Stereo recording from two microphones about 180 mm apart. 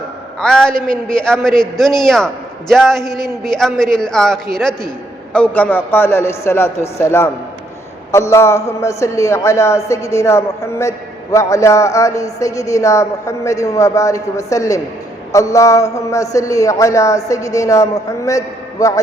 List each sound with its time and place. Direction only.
0.3 s a man's voice: 5° left (ahead or behind)